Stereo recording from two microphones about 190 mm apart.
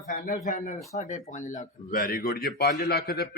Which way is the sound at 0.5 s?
40° left (ahead or behind).